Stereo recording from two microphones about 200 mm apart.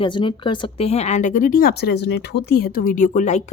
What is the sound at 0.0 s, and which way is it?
Speech, 25° left (ahead or behind).